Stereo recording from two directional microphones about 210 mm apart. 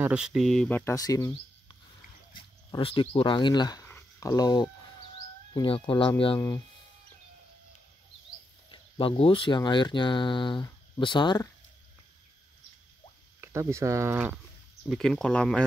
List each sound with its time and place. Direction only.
0.0 s speech: 5° right (ahead or behind); by 6.6 s 20° left (ahead or behind)
8.6 s speech: 25° left (ahead or behind)
13.4 s speech: 15° right (ahead or behind)
14.9 s speech: centre (ahead or behind)